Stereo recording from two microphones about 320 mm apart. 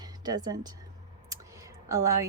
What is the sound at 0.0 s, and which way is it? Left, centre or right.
Speech, centre.